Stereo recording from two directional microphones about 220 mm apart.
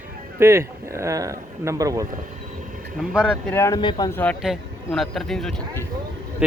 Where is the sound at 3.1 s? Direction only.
5° right (ahead or behind).